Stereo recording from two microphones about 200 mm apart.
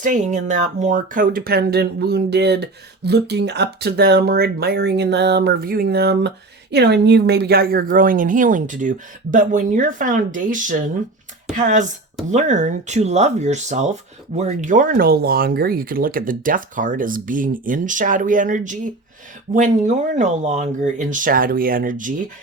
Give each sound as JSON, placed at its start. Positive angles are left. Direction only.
{"t": 0.0, "sound": "speech", "side_deg": -40}